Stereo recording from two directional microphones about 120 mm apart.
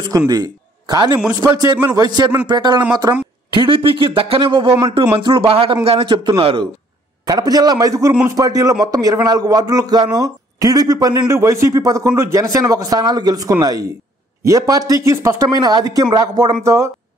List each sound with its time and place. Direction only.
0.3 s a man's voice: 35° right (ahead or behind)
4.6 s a man's voice: 25° right (ahead or behind)
5.2 s speech: 50° right (ahead or behind)
7.2 s a man's voice: 35° right (ahead or behind)